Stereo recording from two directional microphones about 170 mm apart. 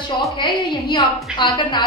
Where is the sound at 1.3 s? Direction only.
25° left (ahead or behind).